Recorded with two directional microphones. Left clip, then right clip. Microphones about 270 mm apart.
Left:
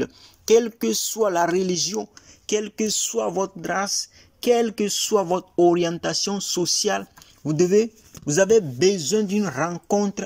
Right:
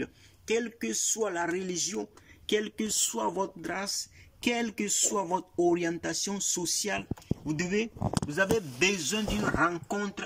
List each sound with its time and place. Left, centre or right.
0.0 s speech: centre
8.3 s speech: left